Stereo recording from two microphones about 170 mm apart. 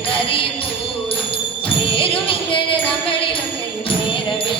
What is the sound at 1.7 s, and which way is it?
Music, 30° left (ahead or behind).